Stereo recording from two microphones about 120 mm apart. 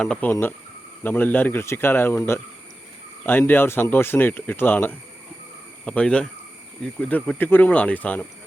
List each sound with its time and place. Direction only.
0.0 s speech: 10° left (ahead or behind)